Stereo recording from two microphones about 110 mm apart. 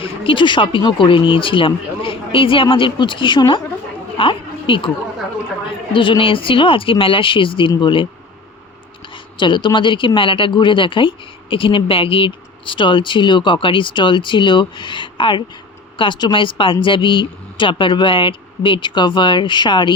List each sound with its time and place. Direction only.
0.0 s a woman's voice: 50° left (ahead or behind)
5.9 s a woman's voice: 50° left (ahead or behind)
9.1 s a woman's voice: 45° left (ahead or behind)